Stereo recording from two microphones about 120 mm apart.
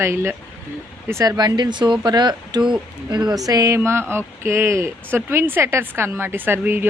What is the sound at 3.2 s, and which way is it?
Speech, 30° right (ahead or behind).